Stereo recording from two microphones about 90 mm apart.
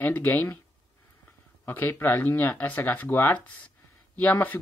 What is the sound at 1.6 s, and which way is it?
Speech, 20° left (ahead or behind).